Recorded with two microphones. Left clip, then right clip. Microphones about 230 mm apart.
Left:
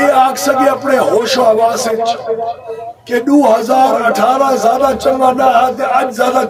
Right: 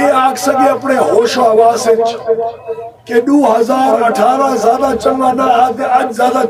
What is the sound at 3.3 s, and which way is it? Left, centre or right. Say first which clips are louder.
A man's voice: left 2 dB; centre.